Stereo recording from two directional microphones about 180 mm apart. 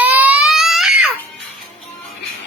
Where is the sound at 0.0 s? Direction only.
10° right (ahead or behind).